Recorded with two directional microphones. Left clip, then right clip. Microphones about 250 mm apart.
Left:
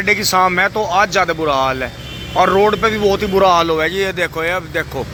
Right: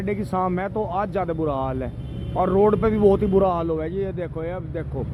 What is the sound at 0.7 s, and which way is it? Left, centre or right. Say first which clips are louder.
Speech: left 10 dB; left.